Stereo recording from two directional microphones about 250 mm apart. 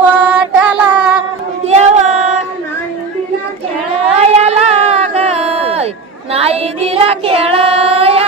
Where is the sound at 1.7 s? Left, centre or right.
Right.